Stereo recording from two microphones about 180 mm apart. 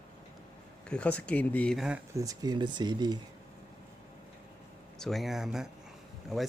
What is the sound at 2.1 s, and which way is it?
Speech, 20° right (ahead or behind).